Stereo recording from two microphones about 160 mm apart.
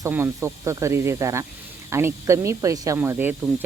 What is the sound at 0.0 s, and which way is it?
Speech, 15° right (ahead or behind).